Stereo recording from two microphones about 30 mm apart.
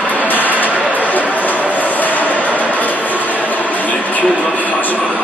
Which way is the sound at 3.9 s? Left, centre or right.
Left.